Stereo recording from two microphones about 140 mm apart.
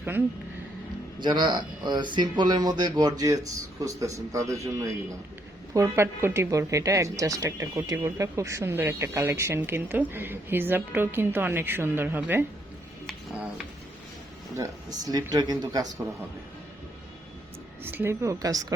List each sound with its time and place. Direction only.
1.2 s speech: 30° right (ahead or behind); by 12.5 s 15° right (ahead or behind)
13.1 s music: 10° right (ahead or behind)
14.5 s speech: 25° right (ahead or behind)
17.8 s speech: 15° right (ahead or behind)